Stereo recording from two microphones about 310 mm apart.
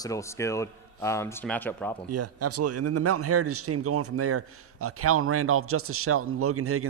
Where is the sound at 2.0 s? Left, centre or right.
Right.